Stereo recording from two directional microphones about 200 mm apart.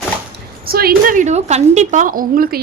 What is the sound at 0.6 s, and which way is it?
A woman's voice, 50° right (ahead or behind).